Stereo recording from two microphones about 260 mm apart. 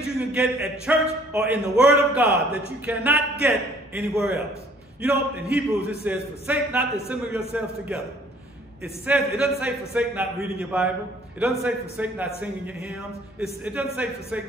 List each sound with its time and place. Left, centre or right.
0.0 s a man's voice: centre